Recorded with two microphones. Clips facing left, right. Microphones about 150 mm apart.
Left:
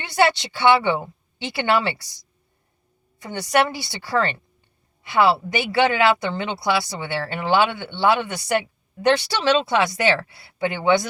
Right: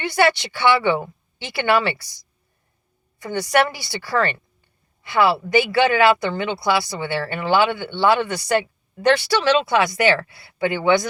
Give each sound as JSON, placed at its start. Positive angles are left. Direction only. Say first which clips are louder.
{"t": 0.0, "sound": "a woman's voice", "louder": "right 1 dB", "side_deg": 25}
{"t": 3.2, "sound": "a woman's voice", "louder": "right 1 dB", "side_deg": 25}